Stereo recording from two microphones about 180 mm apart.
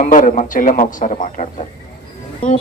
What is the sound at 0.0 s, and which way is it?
A man's voice, 50° left (ahead or behind).